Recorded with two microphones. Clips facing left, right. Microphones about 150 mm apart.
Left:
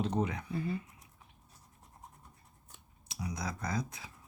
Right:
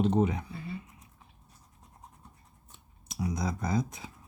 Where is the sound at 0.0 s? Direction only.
25° right (ahead or behind).